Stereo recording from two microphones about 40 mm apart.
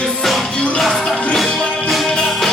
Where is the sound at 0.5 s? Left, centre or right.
Left.